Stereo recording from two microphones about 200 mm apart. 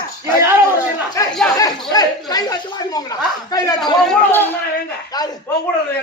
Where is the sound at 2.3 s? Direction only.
20° left (ahead or behind).